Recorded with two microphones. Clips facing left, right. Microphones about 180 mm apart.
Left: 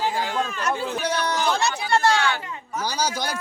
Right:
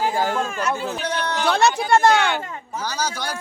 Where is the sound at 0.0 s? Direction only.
45° right (ahead or behind).